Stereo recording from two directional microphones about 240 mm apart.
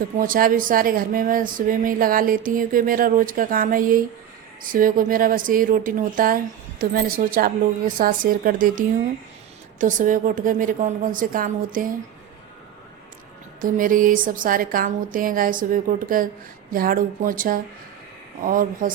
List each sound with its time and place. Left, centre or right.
0.2 s speech: right
9.8 s speech: right
13.6 s speech: right